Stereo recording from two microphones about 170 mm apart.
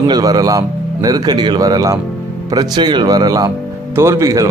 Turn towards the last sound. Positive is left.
turn(degrees=-20)  # may be behind; listen again after turning